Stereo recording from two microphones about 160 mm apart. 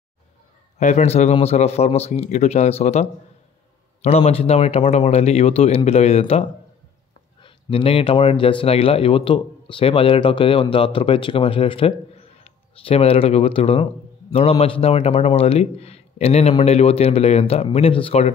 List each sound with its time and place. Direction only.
0.7 s a man's voice: 45° left (ahead or behind)
7.4 s speech: 35° left (ahead or behind)